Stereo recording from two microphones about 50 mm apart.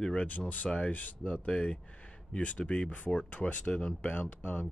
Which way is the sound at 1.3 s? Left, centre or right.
Centre.